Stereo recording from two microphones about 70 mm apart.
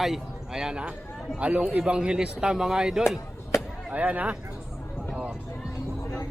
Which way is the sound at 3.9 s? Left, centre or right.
Right.